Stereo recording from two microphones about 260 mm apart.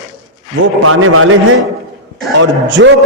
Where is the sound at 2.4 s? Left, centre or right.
Right.